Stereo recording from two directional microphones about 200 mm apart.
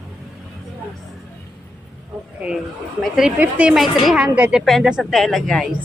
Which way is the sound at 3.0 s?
5° right (ahead or behind).